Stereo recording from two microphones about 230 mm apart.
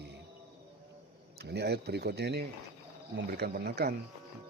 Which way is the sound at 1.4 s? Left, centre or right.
Right.